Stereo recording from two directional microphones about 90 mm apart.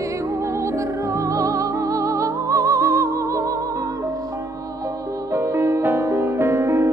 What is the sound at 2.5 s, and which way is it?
Music, 35° right (ahead or behind).